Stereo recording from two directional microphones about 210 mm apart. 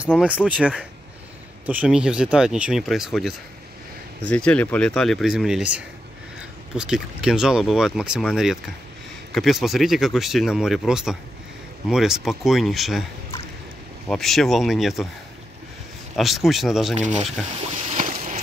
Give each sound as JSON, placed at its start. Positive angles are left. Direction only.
{"t": 0.2, "sound": "speech", "side_deg": -5}
{"t": 14.0, "sound": "speech", "side_deg": 0}
{"t": 16.2, "sound": "speech", "side_deg": 0}
{"t": 17.5, "sound": "a sound", "side_deg": -30}